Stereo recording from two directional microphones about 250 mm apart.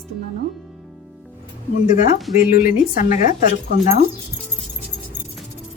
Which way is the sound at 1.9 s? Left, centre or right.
Left.